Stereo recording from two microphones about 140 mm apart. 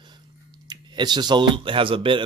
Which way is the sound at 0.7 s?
30° right (ahead or behind).